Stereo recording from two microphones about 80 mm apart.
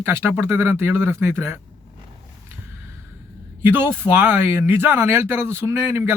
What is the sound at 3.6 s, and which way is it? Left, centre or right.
Speech, right.